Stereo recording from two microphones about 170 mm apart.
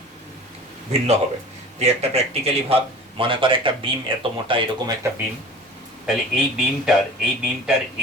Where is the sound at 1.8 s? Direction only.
40° right (ahead or behind).